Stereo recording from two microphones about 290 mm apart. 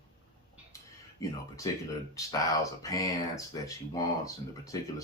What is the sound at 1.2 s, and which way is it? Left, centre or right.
Speech, centre.